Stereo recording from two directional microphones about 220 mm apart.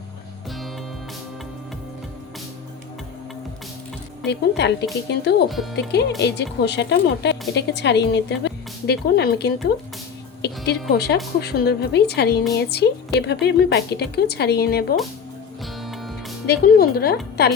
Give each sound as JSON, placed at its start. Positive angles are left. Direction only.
{"t": 4.3, "sound": "speech", "side_deg": 50}
{"t": 15.6, "sound": "music", "side_deg": 0}
{"t": 16.5, "sound": "speech", "side_deg": 45}